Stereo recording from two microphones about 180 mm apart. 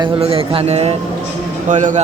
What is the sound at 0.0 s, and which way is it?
Speech, 30° right (ahead or behind).